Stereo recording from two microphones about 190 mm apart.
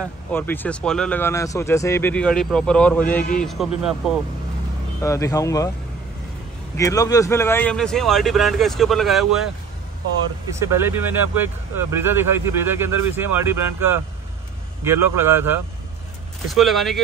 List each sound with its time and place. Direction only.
0.0 s speech: 10° left (ahead or behind)
5.0 s speech: 15° left (ahead or behind)
6.8 s speech: 15° left (ahead or behind); by 9.5 s centre (ahead or behind)
10.6 s speech: 15° right (ahead or behind)
16.5 s speech: centre (ahead or behind)